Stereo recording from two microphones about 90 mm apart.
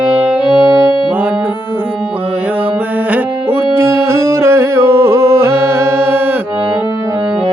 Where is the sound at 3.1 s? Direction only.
25° right (ahead or behind).